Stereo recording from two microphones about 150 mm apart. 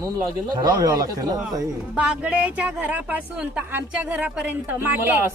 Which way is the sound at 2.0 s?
10° right (ahead or behind).